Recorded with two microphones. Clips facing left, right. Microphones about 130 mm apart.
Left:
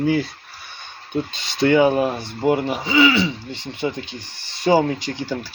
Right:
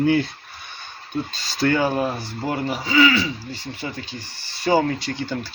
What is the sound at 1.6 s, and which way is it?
Speech, 20° left (ahead or behind).